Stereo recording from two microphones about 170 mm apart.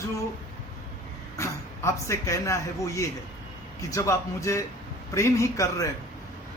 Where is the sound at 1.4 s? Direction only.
15° left (ahead or behind).